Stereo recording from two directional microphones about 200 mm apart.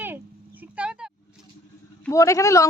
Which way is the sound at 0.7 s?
5° right (ahead or behind).